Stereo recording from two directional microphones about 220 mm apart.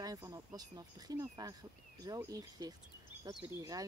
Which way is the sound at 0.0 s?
15° right (ahead or behind).